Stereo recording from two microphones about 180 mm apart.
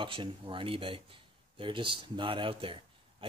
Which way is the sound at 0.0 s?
30° right (ahead or behind).